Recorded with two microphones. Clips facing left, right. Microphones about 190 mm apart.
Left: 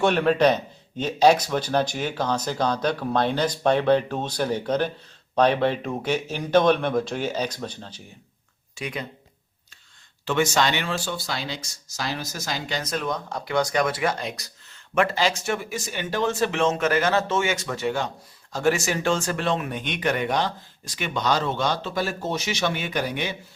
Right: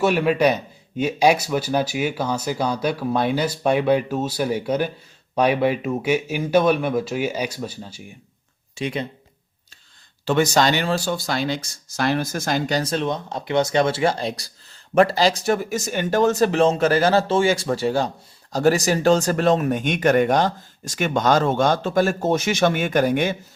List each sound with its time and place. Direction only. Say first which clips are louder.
0.0 s speech: right 1 dB; 5° right (ahead or behind)
8.7 s speech: right 6 dB; 25° right (ahead or behind)
10.2 s speech: right 4 dB; 35° right (ahead or behind)